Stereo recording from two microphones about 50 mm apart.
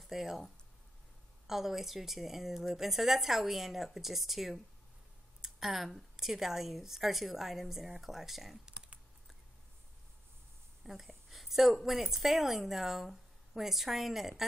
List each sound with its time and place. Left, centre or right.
0.0 s speech: centre
1.5 s a woman's voice: centre
8.6 s typing: right
10.9 s a sound: centre
11.8 s a woman's voice: centre